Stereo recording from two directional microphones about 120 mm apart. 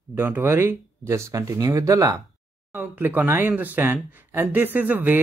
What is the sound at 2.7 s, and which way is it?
Speech, 15° right (ahead or behind).